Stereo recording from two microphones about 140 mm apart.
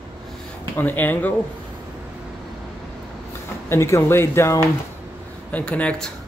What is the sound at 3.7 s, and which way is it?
A man's voice, 20° left (ahead or behind).